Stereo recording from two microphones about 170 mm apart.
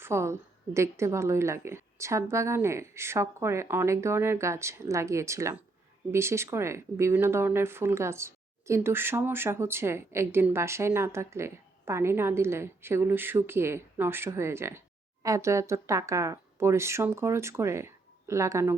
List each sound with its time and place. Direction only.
0.0 s speech: 15° right (ahead or behind)